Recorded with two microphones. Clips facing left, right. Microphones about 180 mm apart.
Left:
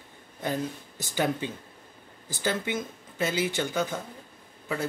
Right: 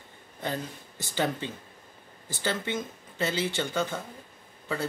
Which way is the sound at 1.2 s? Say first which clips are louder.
Left 2 dB; 10° left (ahead or behind).